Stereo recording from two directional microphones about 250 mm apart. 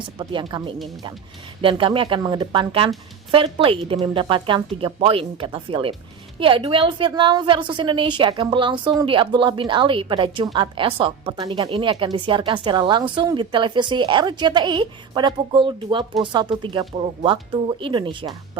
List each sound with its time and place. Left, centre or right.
0.0 s a woman's voice: centre